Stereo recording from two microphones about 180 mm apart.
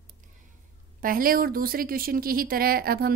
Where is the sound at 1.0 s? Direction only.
55° right (ahead or behind).